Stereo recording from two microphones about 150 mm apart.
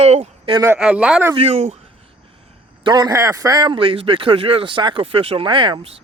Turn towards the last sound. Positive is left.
turn(degrees=-35)  # may be behind; listen again after turning